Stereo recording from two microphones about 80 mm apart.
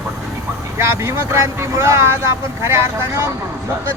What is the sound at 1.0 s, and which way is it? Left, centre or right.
Speech, right.